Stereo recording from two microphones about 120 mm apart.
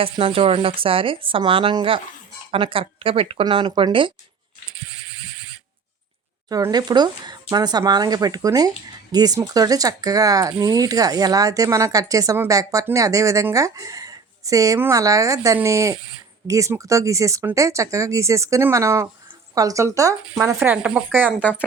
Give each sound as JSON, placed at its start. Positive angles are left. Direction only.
{"t": 0.0, "sound": "speech", "side_deg": -50}
{"t": 6.5, "sound": "speech", "side_deg": -35}
{"t": 20.7, "sound": "speech", "side_deg": -5}